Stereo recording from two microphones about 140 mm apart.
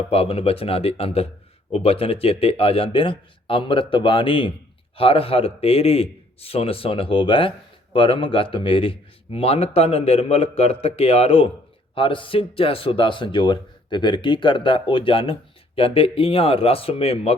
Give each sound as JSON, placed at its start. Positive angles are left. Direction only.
{"t": 0.1, "sound": "speech", "side_deg": 45}